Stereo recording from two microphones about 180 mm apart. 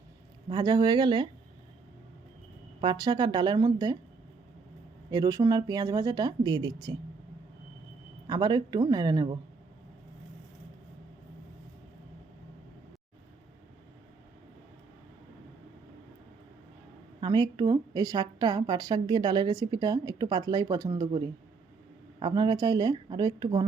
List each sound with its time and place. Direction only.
0.4 s a woman's voice: 20° right (ahead or behind)
2.8 s a woman's voice: 25° right (ahead or behind)
5.1 s a woman's voice: 20° right (ahead or behind)
8.3 s a woman's voice: 25° right (ahead or behind)
17.2 s a woman's voice: 25° right (ahead or behind)